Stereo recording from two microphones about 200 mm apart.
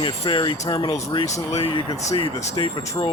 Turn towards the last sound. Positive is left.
turn(degrees=20)  # may be behind; listen again after turning